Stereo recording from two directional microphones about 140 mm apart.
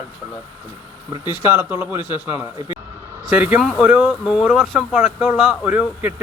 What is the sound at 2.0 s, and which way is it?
Speech, 30° left (ahead or behind).